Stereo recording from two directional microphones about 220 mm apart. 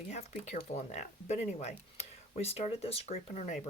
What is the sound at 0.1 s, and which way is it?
Speech, 30° left (ahead or behind).